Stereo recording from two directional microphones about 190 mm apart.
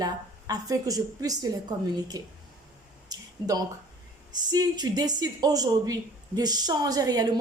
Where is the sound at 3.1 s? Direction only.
20° right (ahead or behind).